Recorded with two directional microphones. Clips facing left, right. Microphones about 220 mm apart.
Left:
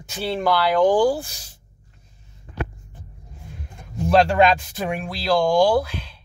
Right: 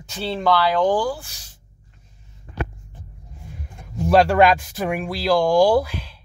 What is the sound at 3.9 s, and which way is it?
Speech, 5° right (ahead or behind).